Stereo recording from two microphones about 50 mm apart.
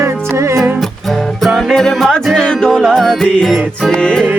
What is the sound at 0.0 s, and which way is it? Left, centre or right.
Music, right.